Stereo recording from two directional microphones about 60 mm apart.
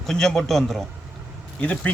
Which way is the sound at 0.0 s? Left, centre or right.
Centre.